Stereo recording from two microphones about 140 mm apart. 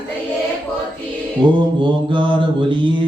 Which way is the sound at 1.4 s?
35° right (ahead or behind).